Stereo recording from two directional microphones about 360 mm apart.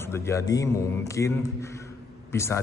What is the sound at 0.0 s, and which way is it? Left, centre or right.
A man's voice, centre.